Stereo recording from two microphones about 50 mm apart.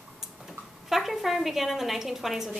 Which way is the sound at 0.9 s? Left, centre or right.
Centre.